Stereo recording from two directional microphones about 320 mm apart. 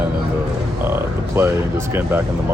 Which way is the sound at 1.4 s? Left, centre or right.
Centre.